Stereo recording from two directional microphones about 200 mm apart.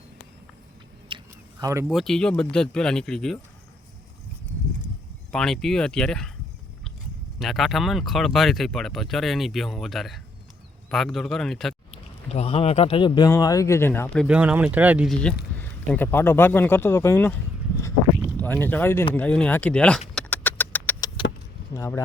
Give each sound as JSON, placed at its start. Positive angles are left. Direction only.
{"t": 1.0, "sound": "a sound", "side_deg": -20}
{"t": 1.9, "sound": "speech", "side_deg": 0}
{"t": 5.3, "sound": "speech", "side_deg": 0}
{"t": 7.3, "sound": "speech", "side_deg": 0}
{"t": 11.9, "sound": "speech", "side_deg": 30}
{"t": 14.3, "sound": "speech", "side_deg": -5}
{"t": 18.3, "sound": "speech", "side_deg": 10}
{"t": 20.1, "sound": "a sound", "side_deg": 10}
{"t": 21.7, "sound": "speech", "side_deg": 15}